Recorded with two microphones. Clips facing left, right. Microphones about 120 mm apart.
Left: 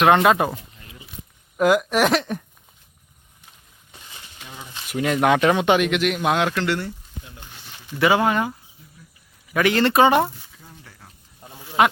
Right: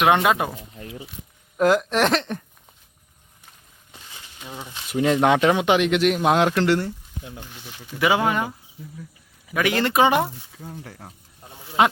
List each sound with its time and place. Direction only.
0.2 s speech: centre (ahead or behind)
0.8 s a sound: 80° right
1.5 s speech: 5° left (ahead or behind)
4.4 s a sound: 15° right (ahead or behind)
4.9 s speech: 25° right (ahead or behind)
5.9 s speech: 35° right (ahead or behind)
7.9 s speech: 15° right (ahead or behind)
9.6 s speech: 15° right (ahead or behind)
10.6 s speech: 50° right (ahead or behind)
11.8 s speech: 20° right (ahead or behind)